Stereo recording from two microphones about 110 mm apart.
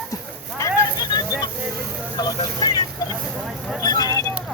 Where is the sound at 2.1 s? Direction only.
40° left (ahead or behind).